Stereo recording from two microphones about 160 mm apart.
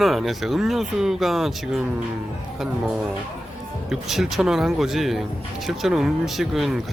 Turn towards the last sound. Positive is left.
turn(degrees=0)  # may be behind; listen again after turning